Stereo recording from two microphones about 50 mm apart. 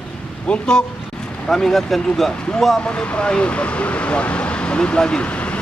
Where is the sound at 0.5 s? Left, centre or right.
Centre.